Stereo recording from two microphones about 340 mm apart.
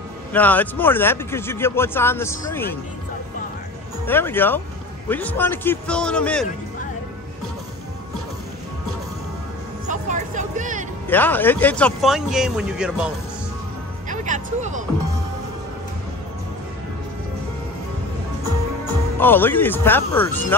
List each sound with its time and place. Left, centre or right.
0.3 s speech: centre
4.0 s speech: centre
9.8 s music: right
11.1 s speech: centre
14.0 s music: right
19.1 s speech: centre